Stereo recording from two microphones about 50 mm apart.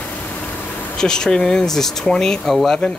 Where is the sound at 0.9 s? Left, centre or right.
Centre.